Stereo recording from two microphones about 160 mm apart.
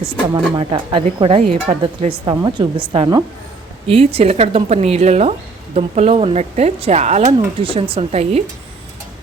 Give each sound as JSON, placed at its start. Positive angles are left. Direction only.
{"t": 0.5, "sound": "a woman's voice", "side_deg": -30}